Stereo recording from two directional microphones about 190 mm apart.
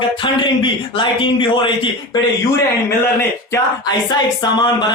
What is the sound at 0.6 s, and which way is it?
A man's voice, 25° left (ahead or behind).